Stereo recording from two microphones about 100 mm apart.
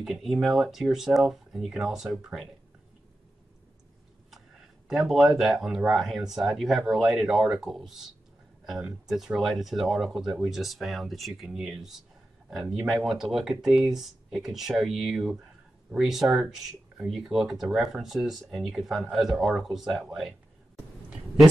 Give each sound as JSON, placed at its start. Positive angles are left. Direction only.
{"t": 0.0, "sound": "speech", "side_deg": 0}
{"t": 4.8, "sound": "speech", "side_deg": -5}